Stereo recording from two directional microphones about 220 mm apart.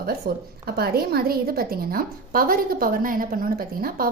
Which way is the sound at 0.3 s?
45° right (ahead or behind).